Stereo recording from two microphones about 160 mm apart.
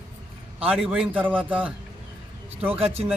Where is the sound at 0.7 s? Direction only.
5° right (ahead or behind).